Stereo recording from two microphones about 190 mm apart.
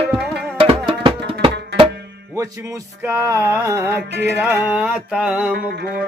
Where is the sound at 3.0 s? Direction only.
15° right (ahead or behind).